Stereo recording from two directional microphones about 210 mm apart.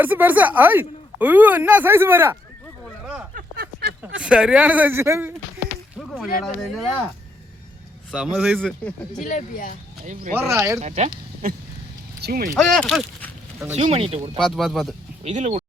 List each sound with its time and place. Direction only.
0.0 s speech: 10° right (ahead or behind)
2.8 s a sound: 5° right (ahead or behind)
3.3 s a sound: 50° right (ahead or behind)
4.2 s speech: 5° right (ahead or behind)
6.0 s a sound: centre (ahead or behind)
8.1 s speech: centre (ahead or behind)
9.2 s speech: 35° left (ahead or behind)
10.3 s speech: 10° right (ahead or behind)
10.8 s speech: 35° right (ahead or behind)
12.2 s speech: 45° right (ahead or behind)
12.5 s speech: centre (ahead or behind)
13.7 s speech: 30° right (ahead or behind)
14.3 s speech: centre (ahead or behind)
15.2 s speech: 35° right (ahead or behind)